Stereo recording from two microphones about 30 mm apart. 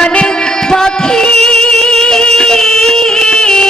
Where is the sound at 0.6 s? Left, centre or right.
Left.